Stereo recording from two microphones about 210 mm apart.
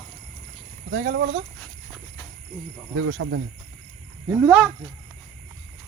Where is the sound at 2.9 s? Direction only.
80° right.